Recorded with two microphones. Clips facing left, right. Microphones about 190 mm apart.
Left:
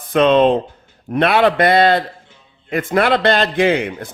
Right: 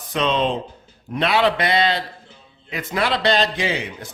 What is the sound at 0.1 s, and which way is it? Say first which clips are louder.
A man's voice: left 9 dB; 55° left (ahead or behind).